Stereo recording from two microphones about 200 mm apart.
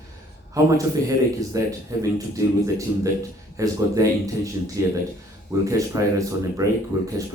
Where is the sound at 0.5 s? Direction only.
15° right (ahead or behind).